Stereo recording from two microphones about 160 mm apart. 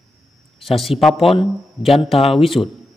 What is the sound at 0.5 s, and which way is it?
A man's voice, centre (ahead or behind).